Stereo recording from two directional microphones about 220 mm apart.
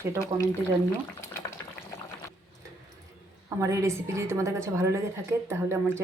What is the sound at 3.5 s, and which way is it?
A woman's voice, 15° right (ahead or behind).